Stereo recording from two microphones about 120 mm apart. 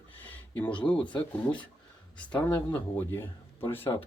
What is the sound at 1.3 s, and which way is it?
Speech, 10° left (ahead or behind).